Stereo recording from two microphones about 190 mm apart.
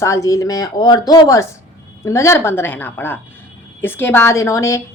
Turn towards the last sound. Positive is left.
turn(degrees=15)  # may be behind; listen again after turning